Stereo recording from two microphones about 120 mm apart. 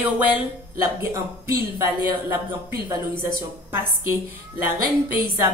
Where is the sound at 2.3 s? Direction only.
35° right (ahead or behind).